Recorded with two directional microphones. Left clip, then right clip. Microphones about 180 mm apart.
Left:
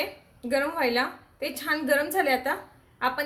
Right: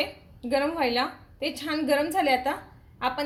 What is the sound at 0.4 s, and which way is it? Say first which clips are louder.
A woman's voice: even; centre (ahead or behind).